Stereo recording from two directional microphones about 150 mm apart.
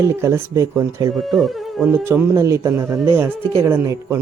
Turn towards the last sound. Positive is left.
turn(degrees=-20)  # may be behind; listen again after turning